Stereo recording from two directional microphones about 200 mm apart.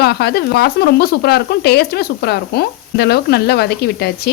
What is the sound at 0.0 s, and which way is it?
Speech, 55° left (ahead or behind).